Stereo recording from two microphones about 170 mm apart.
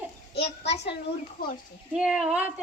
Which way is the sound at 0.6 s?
90° left.